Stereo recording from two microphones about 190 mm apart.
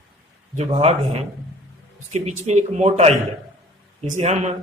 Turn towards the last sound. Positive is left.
turn(degrees=-35)  # may be behind; listen again after turning